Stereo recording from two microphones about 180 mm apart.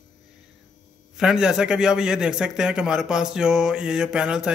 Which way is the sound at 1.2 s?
5° right (ahead or behind).